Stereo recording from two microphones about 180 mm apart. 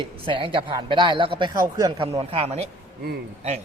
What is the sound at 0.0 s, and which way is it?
Speech, 30° right (ahead or behind).